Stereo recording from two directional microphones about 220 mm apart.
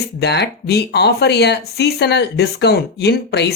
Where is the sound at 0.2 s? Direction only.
50° left (ahead or behind).